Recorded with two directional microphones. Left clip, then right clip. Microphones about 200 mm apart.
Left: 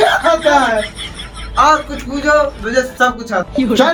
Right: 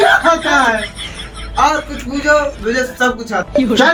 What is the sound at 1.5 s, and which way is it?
Speech, 35° left (ahead or behind).